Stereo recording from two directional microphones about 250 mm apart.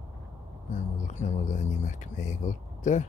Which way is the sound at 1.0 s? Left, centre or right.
Left.